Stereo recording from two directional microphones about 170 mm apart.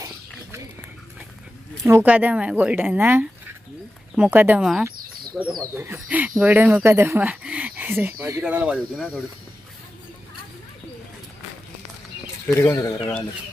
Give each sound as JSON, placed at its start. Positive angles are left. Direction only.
{"t": 1.8, "sound": "speech", "side_deg": -15}
{"t": 12.5, "sound": "speech", "side_deg": 15}